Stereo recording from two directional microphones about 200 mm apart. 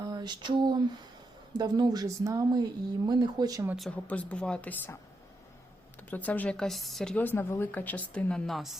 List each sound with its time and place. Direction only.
0.0 s a sound: 20° right (ahead or behind)
1.5 s speech: 20° right (ahead or behind)
3.8 s a woman's voice: 5° left (ahead or behind)
6.0 s a woman's voice: 10° left (ahead or behind)